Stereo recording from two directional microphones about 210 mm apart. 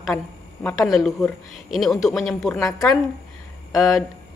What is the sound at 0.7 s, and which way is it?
Speech, centre (ahead or behind).